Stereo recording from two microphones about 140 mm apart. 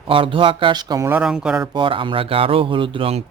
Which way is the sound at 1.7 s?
35° right (ahead or behind).